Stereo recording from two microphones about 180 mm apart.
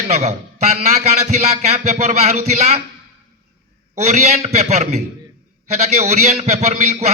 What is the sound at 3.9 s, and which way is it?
A man's voice, 40° right (ahead or behind).